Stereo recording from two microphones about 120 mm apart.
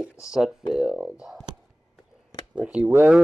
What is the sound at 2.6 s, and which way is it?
Speech, 10° right (ahead or behind).